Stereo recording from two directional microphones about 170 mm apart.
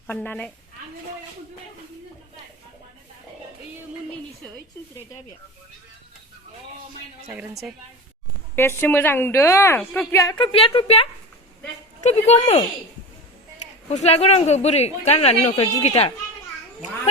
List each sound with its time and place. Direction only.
0.1 s a woman's voice: 10° left (ahead or behind)
8.5 s a woman's voice: 15° left (ahead or behind); by 12.6 s 40° left (ahead or behind)
13.9 s speech: 40° left (ahead or behind)